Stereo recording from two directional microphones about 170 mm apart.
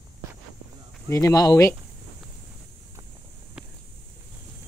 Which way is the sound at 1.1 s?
20° left (ahead or behind).